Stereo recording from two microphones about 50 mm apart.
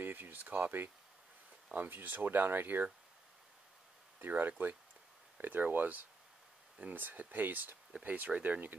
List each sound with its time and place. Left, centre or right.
0.0 s speech: right
4.2 s speech: right